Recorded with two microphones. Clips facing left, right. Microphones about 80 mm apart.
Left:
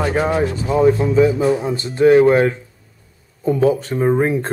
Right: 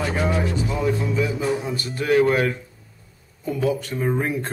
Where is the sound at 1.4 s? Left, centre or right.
Left.